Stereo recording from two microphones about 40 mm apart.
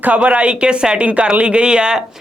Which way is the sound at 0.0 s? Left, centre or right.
Right.